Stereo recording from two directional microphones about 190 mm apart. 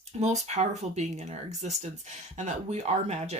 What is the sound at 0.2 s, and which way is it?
Speech, 35° right (ahead or behind).